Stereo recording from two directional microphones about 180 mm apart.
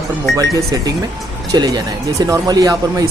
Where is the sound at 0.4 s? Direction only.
20° right (ahead or behind).